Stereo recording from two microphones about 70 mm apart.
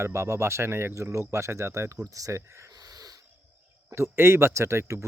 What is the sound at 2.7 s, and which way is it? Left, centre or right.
Snort, right.